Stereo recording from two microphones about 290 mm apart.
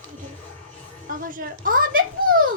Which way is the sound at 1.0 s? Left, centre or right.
Right.